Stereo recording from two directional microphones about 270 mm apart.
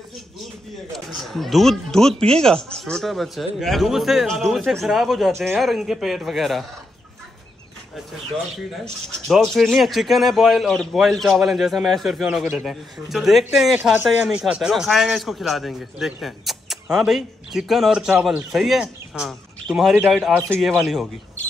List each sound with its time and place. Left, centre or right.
0.9 s speech: centre
8.8 s speech: centre